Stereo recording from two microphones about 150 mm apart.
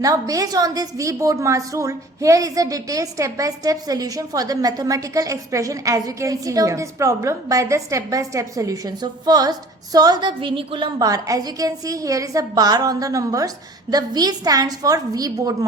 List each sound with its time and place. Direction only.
0.0 s a woman's voice: 25° right (ahead or behind)